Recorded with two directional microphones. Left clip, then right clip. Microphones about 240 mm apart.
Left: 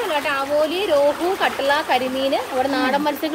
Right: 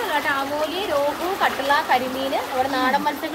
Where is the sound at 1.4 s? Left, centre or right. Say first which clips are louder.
Right 1 dB; left.